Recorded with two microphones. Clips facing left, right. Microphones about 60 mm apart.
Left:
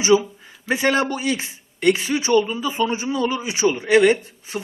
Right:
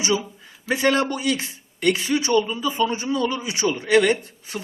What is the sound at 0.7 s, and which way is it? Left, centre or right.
Speech, left.